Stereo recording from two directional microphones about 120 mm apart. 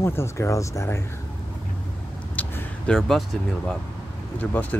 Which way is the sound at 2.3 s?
15° left (ahead or behind).